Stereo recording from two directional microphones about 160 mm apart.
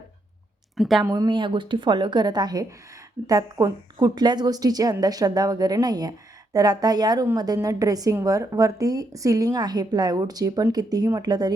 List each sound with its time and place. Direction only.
0.8 s a woman's voice: centre (ahead or behind)
1.0 s a woman's voice: 20° right (ahead or behind)